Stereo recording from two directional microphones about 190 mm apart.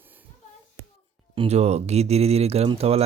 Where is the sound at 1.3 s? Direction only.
35° right (ahead or behind).